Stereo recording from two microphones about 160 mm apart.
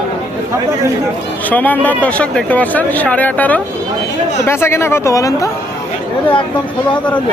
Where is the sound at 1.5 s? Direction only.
10° left (ahead or behind).